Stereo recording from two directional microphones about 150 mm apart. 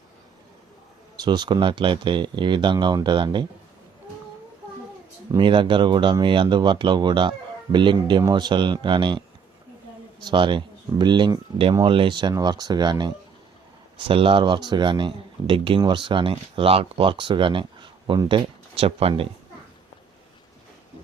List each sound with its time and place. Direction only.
1.1 s speech: 30° right (ahead or behind)
5.4 s speech: 35° right (ahead or behind)
10.2 s speech: 30° right (ahead or behind)